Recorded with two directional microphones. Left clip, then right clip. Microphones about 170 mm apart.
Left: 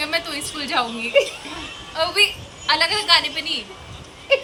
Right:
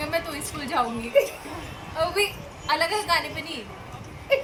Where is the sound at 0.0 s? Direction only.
20° right (ahead or behind).